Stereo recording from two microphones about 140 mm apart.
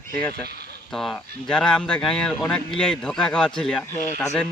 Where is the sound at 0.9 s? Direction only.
5° left (ahead or behind).